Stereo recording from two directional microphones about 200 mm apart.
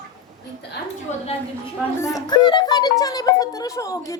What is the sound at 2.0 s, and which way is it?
Speech, 20° left (ahead or behind).